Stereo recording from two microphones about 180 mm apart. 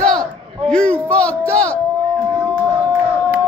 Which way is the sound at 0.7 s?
5° left (ahead or behind).